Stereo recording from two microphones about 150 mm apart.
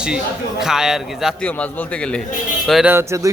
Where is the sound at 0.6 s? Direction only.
5° right (ahead or behind).